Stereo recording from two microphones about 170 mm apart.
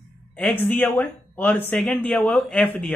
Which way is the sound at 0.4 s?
10° left (ahead or behind).